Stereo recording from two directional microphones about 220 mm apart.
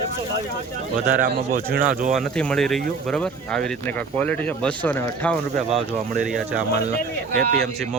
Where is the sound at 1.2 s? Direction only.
45° right (ahead or behind).